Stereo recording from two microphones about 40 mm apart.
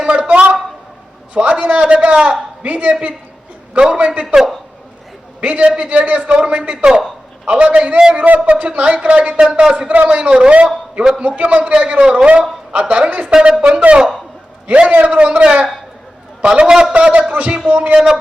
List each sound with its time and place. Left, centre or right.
0.0 s a sound: right
1.3 s a man's voice: right
5.4 s a man's voice: right
8.2 s a man's voice: right